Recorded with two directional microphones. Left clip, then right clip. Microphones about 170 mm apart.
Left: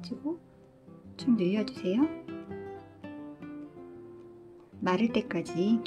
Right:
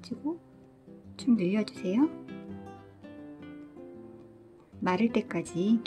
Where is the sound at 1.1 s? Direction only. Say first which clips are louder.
Even; 10° right (ahead or behind).